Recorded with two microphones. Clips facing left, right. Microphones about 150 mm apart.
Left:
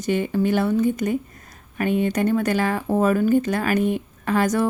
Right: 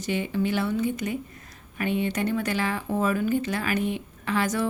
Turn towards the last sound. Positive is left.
turn(degrees=45)  # may be behind; listen again after turning